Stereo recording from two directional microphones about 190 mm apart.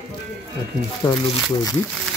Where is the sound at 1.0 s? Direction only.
20° left (ahead or behind).